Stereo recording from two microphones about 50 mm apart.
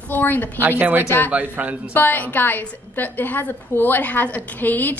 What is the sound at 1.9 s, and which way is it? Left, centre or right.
A woman's voice, left.